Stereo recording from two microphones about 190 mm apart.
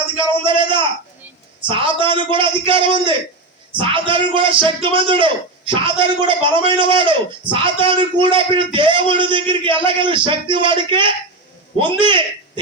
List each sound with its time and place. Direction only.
0.2 s a man's voice: 25° right (ahead or behind)